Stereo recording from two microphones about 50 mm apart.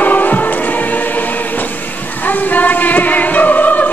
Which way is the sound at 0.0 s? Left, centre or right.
Left.